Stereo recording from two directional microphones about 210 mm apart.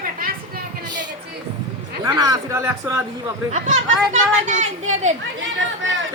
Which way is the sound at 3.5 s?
35° right (ahead or behind).